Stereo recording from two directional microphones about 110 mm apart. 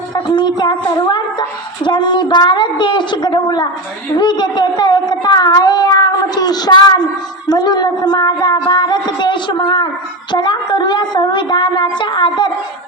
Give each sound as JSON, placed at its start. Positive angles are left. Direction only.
{"t": 0.1, "sound": "a woman's voice", "side_deg": 40}